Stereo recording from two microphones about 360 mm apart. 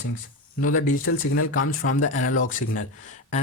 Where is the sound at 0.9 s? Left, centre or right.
Left.